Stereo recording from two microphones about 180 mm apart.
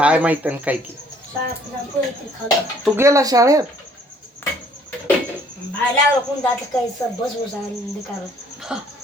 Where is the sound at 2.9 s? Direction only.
15° right (ahead or behind).